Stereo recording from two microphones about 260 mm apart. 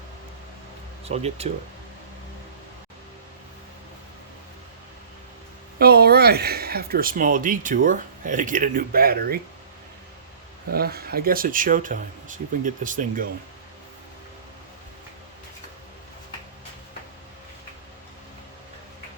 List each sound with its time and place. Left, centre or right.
1.0 s speech: right
5.8 s speech: right
10.7 s speech: right